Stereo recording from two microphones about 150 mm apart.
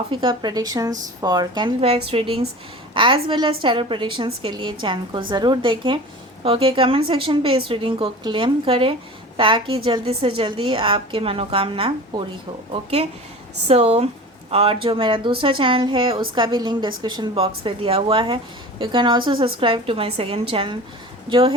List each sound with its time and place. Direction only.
0.1 s a woman's voice: 35° right (ahead or behind)